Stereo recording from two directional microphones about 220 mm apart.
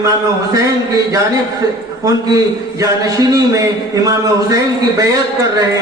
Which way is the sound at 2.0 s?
15° right (ahead or behind).